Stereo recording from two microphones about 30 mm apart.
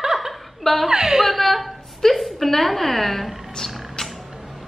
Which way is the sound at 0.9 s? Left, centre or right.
Right.